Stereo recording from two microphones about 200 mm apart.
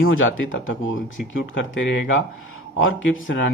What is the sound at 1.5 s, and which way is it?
Speech, 65° left (ahead or behind).